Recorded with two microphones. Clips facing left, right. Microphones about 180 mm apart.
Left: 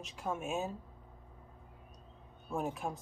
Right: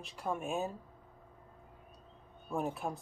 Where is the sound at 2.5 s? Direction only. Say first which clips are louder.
Right 1 dB; centre (ahead or behind).